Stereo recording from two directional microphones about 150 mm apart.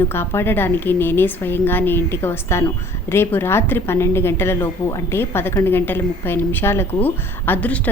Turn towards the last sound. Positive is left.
turn(degrees=10)  # may be behind; listen again after turning